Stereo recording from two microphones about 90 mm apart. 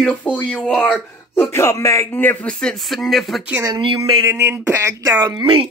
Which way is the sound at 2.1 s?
20° left (ahead or behind).